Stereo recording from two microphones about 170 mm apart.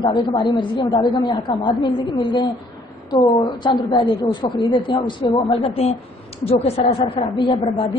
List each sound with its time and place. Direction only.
0.0 s a woman's voice: 25° left (ahead or behind)
3.1 s a woman's voice: 30° left (ahead or behind)